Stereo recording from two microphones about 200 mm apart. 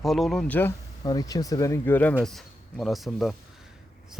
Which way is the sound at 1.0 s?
20° left (ahead or behind).